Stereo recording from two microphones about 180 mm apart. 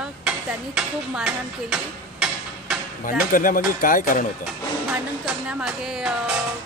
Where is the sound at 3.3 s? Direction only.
50° left (ahead or behind).